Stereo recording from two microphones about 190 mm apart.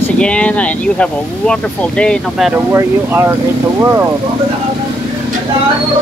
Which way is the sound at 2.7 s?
15° right (ahead or behind).